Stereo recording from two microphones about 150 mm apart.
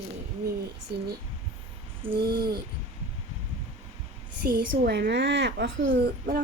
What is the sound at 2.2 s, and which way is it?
Speech, 90° right.